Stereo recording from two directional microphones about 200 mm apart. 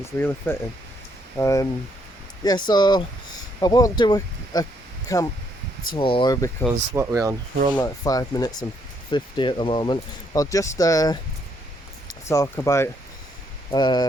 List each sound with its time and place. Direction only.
0.0 s speech: 10° left (ahead or behind)
6.9 s speech: 15° right (ahead or behind)
7.8 s speech: 15° left (ahead or behind)
12.3 s speech: 15° left (ahead or behind)